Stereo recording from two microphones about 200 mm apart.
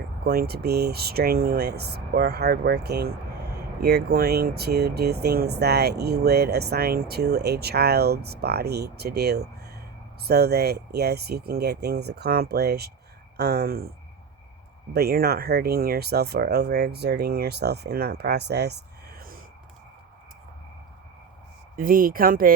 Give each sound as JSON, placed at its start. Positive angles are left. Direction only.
{"t": 0.3, "sound": "speech", "side_deg": -55}
{"t": 14.9, "sound": "speech", "side_deg": -50}
{"t": 21.8, "sound": "speech", "side_deg": -45}